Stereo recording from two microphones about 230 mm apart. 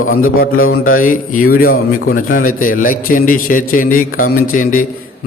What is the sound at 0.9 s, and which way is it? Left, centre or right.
A man's voice, left.